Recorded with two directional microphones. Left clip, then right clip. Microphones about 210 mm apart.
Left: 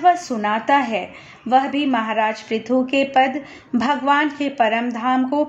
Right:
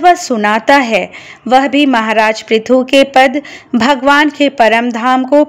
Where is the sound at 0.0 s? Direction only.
45° right (ahead or behind).